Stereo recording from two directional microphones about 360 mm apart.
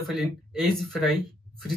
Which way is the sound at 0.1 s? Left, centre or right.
Centre.